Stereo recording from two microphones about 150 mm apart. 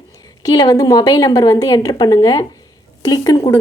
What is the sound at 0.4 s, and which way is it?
A woman's voice, 25° left (ahead or behind).